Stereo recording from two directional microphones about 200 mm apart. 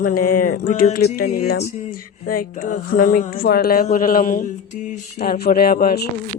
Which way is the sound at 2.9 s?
45° left (ahead or behind).